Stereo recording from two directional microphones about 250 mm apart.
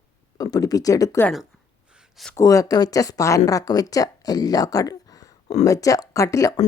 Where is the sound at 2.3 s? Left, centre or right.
Centre.